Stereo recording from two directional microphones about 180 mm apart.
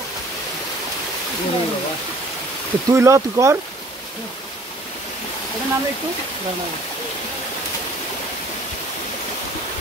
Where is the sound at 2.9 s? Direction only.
15° right (ahead or behind).